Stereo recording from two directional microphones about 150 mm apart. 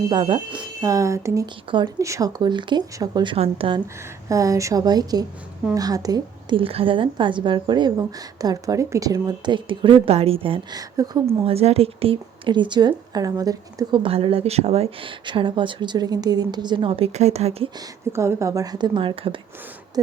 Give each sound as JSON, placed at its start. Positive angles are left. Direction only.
{"t": 0.1, "sound": "a woman's voice", "side_deg": -30}
{"t": 0.8, "sound": "a woman's voice", "side_deg": -20}
{"t": 3.3, "sound": "a woman's voice", "side_deg": -40}
{"t": 4.3, "sound": "a woman's voice", "side_deg": -20}
{"t": 11.4, "sound": "a woman's voice", "side_deg": -40}
{"t": 13.9, "sound": "a woman's voice", "side_deg": -35}
{"t": 17.7, "sound": "a woman's voice", "side_deg": -15}